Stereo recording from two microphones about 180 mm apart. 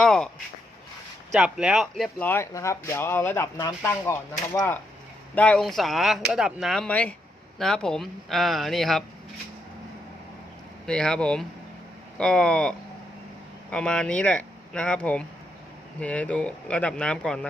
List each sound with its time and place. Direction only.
0.0 s a sound: centre (ahead or behind)
1.4 s speech: 5° right (ahead or behind)
10.8 s speech: 5° left (ahead or behind)